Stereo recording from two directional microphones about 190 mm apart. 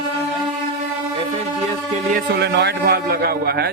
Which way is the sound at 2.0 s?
50° right (ahead or behind).